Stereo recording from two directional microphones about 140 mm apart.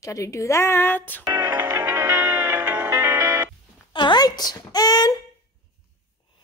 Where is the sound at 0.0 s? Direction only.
20° left (ahead or behind).